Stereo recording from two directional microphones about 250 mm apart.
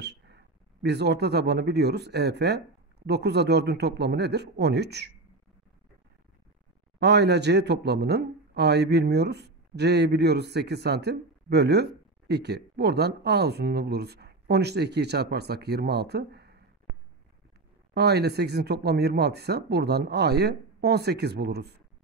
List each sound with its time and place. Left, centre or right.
0.0 s a sound: right
0.8 s speech: right
7.0 s speech: right
17.9 s speech: right